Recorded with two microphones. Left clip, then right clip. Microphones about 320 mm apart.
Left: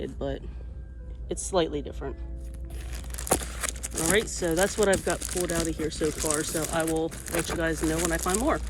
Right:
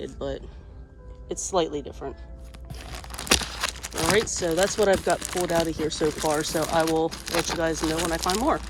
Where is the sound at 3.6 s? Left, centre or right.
Right.